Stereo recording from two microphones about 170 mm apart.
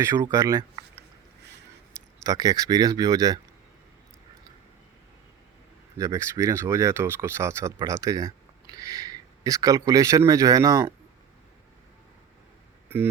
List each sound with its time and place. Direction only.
0.0 s speech: 15° right (ahead or behind)
2.2 s speech: 20° right (ahead or behind)
6.0 s speech: 20° right (ahead or behind)